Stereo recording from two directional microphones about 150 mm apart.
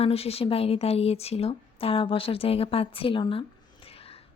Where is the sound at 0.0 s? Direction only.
40° left (ahead or behind).